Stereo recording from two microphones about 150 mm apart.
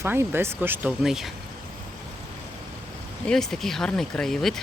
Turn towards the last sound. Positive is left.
turn(degrees=0)  # may be behind; listen again after turning